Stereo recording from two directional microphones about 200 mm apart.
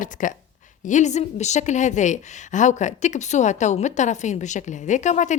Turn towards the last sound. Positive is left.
turn(degrees=35)  # may be behind; listen again after turning